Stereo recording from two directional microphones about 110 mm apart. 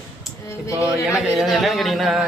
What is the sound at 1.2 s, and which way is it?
Speech, centre (ahead or behind).